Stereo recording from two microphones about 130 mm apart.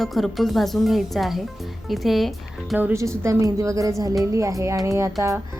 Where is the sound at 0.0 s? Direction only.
Centre (ahead or behind).